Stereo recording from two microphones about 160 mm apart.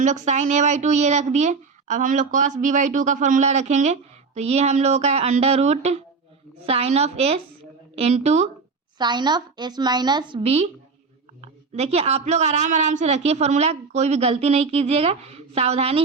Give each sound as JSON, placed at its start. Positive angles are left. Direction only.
{"t": 0.0, "sound": "a woman's voice", "side_deg": -50}
{"t": 9.0, "sound": "a woman's voice", "side_deg": -30}